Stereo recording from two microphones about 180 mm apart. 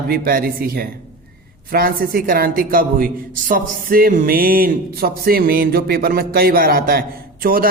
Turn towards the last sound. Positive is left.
turn(degrees=-55)  # may be behind; listen again after turning